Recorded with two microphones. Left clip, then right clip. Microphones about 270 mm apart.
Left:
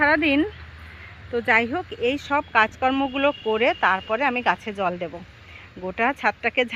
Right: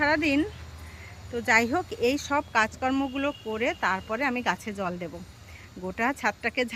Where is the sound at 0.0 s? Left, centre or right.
Centre.